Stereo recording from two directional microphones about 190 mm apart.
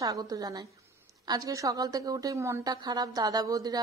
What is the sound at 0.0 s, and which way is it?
A woman's voice, 20° right (ahead or behind).